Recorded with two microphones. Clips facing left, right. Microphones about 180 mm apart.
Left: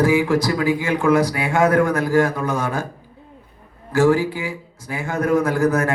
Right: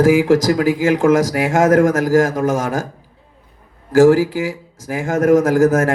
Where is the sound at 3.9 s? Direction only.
90° right.